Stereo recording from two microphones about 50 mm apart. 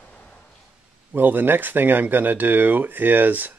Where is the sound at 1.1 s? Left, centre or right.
Right.